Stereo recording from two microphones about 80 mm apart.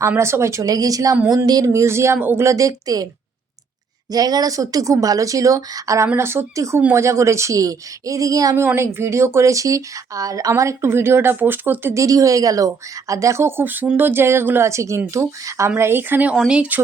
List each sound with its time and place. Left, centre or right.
0.2 s speech: right
1.5 s a sound: right
1.7 s speech: right
4.1 s speech: right
6.1 s speech: right
8.6 s speech: right
10.5 s speech: right
11.9 s speech: right
15.8 s speech: right